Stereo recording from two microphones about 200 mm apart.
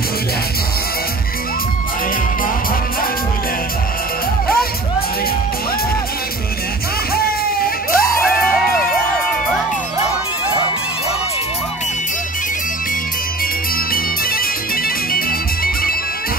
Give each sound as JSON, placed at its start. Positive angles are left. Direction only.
{"t": 7.2, "sound": "music", "side_deg": 50}
{"t": 13.9, "sound": "music", "side_deg": 45}